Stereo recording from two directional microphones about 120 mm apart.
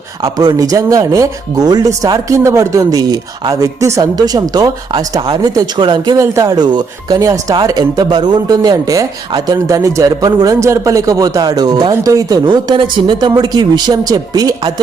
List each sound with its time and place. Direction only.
0.2 s speech: 30° right (ahead or behind)
6.1 s speech: 30° right (ahead or behind)
7.5 s speech: 40° right (ahead or behind)